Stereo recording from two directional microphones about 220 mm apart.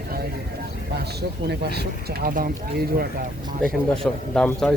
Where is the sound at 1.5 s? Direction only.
45° right (ahead or behind).